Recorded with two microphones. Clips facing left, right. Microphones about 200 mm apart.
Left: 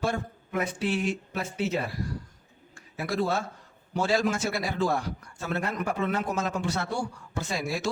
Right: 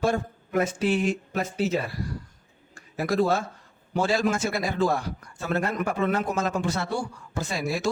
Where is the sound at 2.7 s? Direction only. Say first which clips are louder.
Right 5 dB; 40° right (ahead or behind).